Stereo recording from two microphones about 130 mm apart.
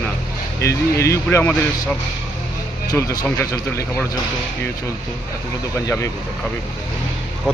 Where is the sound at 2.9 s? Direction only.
25° left (ahead or behind).